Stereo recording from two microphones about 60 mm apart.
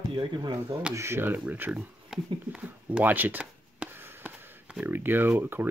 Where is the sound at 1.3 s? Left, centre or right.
Right.